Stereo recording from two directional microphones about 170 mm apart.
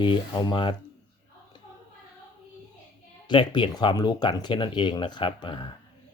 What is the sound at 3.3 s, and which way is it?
Speech, 25° left (ahead or behind).